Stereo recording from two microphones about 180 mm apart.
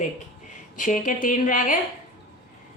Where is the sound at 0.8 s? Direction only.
45° left (ahead or behind).